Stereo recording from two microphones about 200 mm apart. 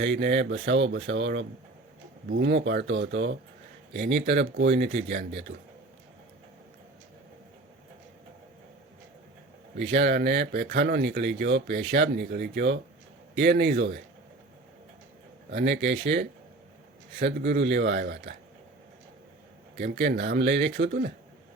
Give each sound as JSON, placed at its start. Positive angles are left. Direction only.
{"t": 0.0, "sound": "speech", "side_deg": -65}
{"t": 9.7, "sound": "speech", "side_deg": -65}
{"t": 15.4, "sound": "speech", "side_deg": -60}
{"t": 19.7, "sound": "speech", "side_deg": -55}